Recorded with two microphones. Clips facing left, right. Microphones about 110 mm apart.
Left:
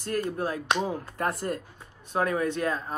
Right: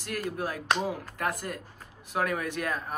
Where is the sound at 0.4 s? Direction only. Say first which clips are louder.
Left 2 dB; 30° left (ahead or behind).